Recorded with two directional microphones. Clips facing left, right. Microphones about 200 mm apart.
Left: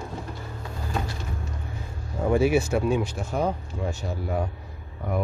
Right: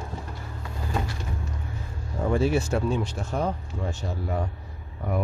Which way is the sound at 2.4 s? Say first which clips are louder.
Left 2 dB; 15° left (ahead or behind).